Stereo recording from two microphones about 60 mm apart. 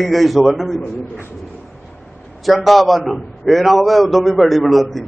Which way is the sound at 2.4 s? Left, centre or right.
Centre.